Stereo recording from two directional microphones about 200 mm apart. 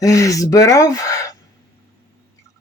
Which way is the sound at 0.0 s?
15° left (ahead or behind).